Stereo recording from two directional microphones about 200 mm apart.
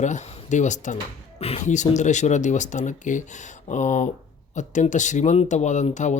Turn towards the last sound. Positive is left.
turn(degrees=35)  # may be behind; listen again after turning